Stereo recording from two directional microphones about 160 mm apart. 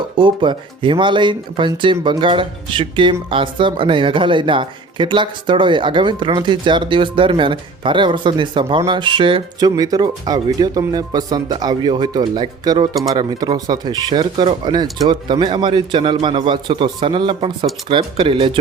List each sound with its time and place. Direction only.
0.2 s speech: 30° right (ahead or behind)